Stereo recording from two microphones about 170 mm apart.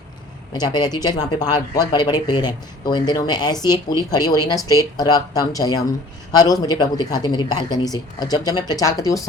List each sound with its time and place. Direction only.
0.5 s speech: 25° left (ahead or behind)